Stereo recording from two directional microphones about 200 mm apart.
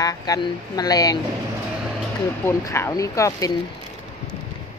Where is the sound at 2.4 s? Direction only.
15° left (ahead or behind).